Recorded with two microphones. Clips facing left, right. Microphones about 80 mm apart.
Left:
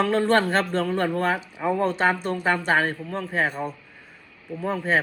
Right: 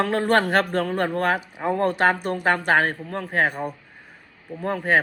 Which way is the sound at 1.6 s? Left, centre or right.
Right.